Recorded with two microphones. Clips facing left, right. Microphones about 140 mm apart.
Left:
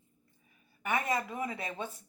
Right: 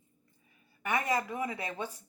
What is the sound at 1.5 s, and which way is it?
Speech, 25° left (ahead or behind).